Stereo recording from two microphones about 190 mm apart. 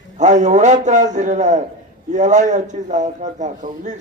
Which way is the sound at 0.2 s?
40° right (ahead or behind).